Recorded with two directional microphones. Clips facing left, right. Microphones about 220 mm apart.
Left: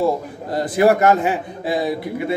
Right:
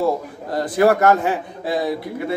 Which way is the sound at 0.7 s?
20° left (ahead or behind).